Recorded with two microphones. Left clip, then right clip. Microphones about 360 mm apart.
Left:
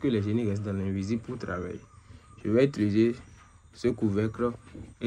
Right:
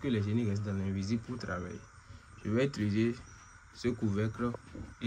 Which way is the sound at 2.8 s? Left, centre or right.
Left.